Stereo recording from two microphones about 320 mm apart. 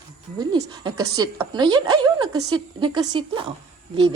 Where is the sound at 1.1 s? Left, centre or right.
Centre.